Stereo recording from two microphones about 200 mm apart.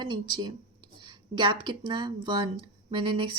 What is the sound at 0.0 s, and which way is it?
A woman's voice, 20° right (ahead or behind).